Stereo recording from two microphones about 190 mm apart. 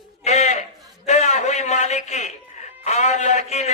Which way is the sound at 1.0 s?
35° left (ahead or behind).